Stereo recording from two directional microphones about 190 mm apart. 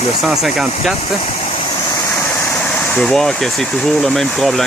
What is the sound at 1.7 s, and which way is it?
Speech, 15° left (ahead or behind).